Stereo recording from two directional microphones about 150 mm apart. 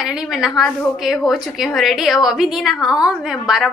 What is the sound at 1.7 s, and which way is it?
Speech, centre (ahead or behind).